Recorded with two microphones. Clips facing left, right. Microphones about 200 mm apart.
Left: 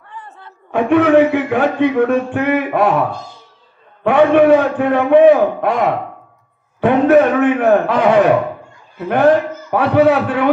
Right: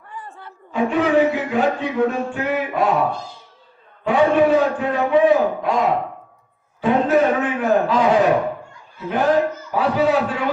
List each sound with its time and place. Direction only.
0.1 s a sound: 10° right (ahead or behind)
0.7 s speech: 60° left (ahead or behind)
4.0 s speech: 60° left (ahead or behind)